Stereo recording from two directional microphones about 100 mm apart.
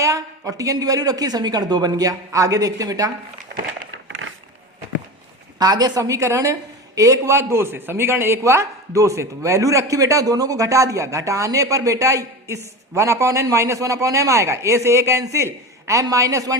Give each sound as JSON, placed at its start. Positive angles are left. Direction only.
{"t": 0.0, "sound": "a woman's voice", "side_deg": -35}
{"t": 5.5, "sound": "a woman's voice", "side_deg": -40}